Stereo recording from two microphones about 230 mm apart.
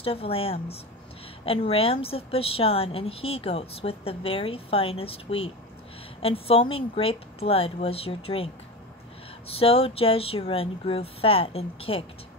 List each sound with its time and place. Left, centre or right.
0.0 s a woman's voice: left
9.5 s a woman's voice: left